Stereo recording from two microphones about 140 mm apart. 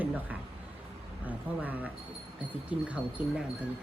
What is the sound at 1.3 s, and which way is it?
A woman's voice, 10° right (ahead or behind).